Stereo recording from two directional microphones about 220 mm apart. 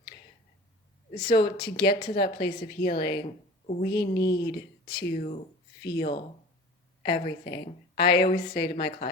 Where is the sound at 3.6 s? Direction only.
45° left (ahead or behind).